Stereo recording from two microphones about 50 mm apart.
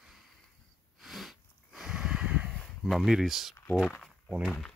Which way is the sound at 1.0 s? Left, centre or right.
Centre.